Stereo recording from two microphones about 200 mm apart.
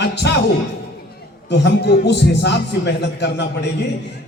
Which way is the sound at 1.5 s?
60° left (ahead or behind).